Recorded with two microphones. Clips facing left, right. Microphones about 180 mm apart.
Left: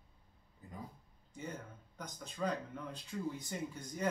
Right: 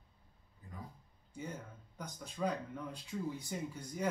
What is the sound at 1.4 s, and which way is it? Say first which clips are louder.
A man's voice: even; 10° right (ahead or behind).